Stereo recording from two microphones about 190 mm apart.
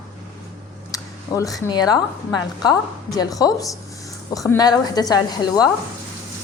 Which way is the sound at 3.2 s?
20° left (ahead or behind).